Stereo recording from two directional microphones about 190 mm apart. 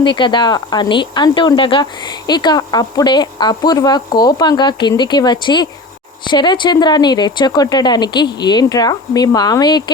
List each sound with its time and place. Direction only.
0.0 s speech: 25° left (ahead or behind)